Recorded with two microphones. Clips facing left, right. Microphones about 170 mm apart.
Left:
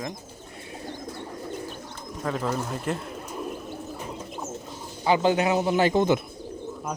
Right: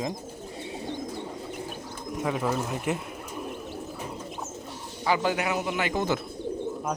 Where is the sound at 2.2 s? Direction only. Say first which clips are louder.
Even; 5° right (ahead or behind).